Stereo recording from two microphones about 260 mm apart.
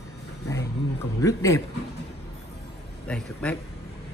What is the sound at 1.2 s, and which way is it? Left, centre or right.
Speech, centre.